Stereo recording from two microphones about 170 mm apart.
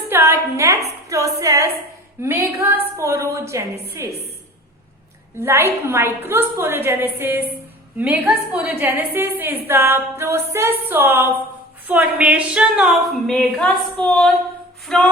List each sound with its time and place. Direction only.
0.1 s a woman's voice: 15° right (ahead or behind)
5.4 s a woman's voice: 15° right (ahead or behind); by 15.0 s 5° left (ahead or behind)